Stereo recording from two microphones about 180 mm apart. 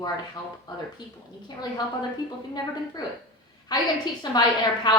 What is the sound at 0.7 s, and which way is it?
A woman's voice, 25° left (ahead or behind).